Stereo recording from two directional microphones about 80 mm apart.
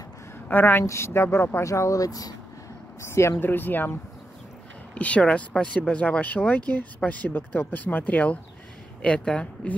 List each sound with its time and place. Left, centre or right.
0.5 s speech: left
0.8 s speech: left
1.7 s speech: left
3.0 s speech: left
4.9 s a woman's voice: centre